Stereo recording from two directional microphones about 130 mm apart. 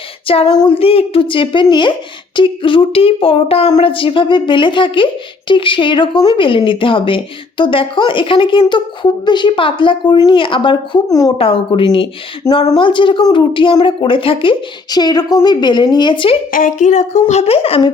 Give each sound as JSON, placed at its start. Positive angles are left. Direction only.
{"t": 0.4, "sound": "a woman's voice", "side_deg": 30}
{"t": 0.7, "sound": "a woman's voice", "side_deg": 45}
{"t": 14.9, "sound": "a woman's voice", "side_deg": 30}
{"t": 16.5, "sound": "speech", "side_deg": 90}